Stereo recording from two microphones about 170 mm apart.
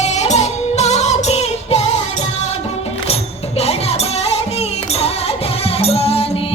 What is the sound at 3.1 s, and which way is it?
Music, 35° left (ahead or behind).